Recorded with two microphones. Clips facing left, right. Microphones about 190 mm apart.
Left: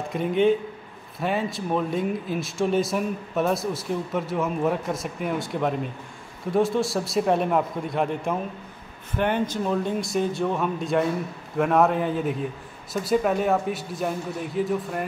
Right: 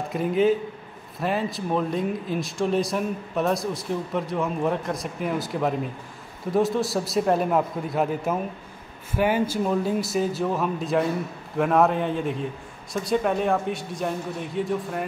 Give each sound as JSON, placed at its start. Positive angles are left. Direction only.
{"t": 0.1, "sound": "speech", "side_deg": 0}